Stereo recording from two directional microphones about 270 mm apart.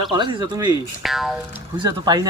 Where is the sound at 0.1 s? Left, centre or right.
Centre.